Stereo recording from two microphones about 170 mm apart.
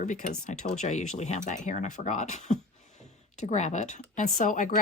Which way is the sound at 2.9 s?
45° left (ahead or behind).